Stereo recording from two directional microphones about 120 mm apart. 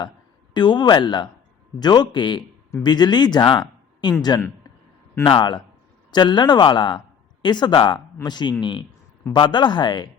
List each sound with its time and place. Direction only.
0.5 s speech: 40° left (ahead or behind)